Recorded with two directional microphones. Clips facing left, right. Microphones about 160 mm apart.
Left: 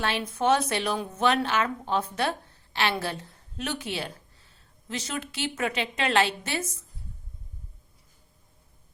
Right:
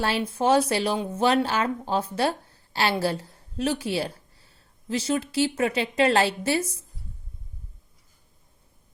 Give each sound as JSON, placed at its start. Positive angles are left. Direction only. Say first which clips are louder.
{"t": 0.0, "sound": "a woman's voice", "louder": "right 2 dB", "side_deg": -30}